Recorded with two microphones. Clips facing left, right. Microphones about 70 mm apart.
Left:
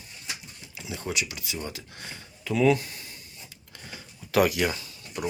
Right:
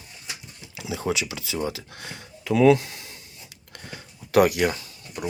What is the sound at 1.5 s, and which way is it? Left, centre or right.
Speech, right.